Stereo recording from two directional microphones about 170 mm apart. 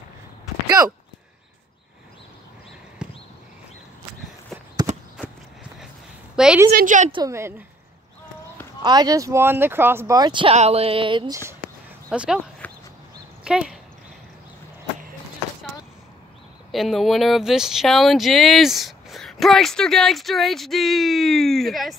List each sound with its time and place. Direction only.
0.7 s speech: 20° right (ahead or behind)
3.0 s a sound: 5° right (ahead or behind)
6.3 s a woman's voice: 5° right (ahead or behind)
6.7 s a woman's voice: 55° right (ahead or behind)
7.1 s speech: 25° right (ahead or behind)
7.3 s speech: 15° right (ahead or behind)
8.8 s speech: 25° right (ahead or behind)
12.1 s speech: 5° right (ahead or behind)
13.4 s speech: 5° right (ahead or behind)
16.7 s speech: centre (ahead or behind)